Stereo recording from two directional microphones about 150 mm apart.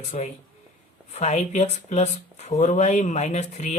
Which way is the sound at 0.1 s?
50° left (ahead or behind).